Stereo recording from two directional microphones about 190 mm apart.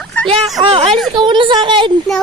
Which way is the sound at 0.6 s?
25° right (ahead or behind).